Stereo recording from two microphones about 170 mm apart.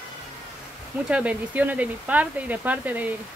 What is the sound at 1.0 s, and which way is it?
Speech, 5° right (ahead or behind).